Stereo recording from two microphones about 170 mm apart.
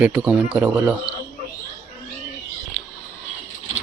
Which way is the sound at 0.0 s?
5° right (ahead or behind).